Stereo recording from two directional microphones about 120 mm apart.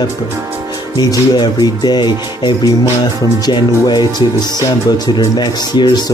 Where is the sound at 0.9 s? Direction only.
35° left (ahead or behind).